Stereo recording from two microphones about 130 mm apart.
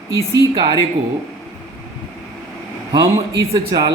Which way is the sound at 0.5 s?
35° right (ahead or behind).